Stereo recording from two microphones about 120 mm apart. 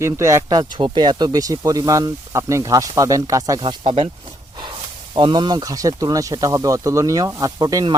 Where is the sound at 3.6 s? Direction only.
45° right (ahead or behind).